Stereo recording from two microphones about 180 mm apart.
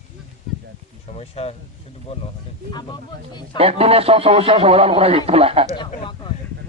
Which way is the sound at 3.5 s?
35° right (ahead or behind).